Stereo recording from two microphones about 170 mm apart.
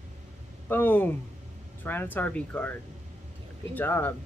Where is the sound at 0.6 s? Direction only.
10° left (ahead or behind).